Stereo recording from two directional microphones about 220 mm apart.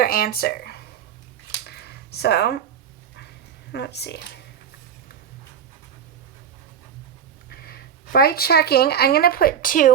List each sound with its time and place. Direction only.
0.0 s speech: 40° left (ahead or behind)
1.6 s a sound: 45° left (ahead or behind)
3.2 s dog: 50° left (ahead or behind)
7.5 s speech: 45° left (ahead or behind)